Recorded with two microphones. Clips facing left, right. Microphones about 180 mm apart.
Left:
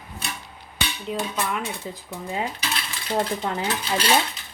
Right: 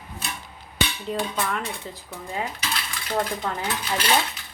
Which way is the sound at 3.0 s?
25° left (ahead or behind).